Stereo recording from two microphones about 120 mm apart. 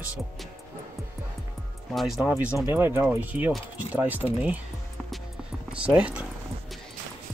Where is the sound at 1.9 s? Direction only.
Centre (ahead or behind).